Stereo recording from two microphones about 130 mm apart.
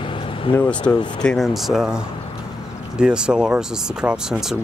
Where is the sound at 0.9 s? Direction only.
25° left (ahead or behind).